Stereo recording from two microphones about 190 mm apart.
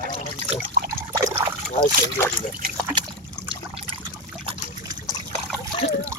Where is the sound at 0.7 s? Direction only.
50° right (ahead or behind).